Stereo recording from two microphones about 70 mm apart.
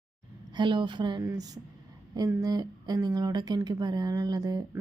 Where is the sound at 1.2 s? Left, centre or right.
Right.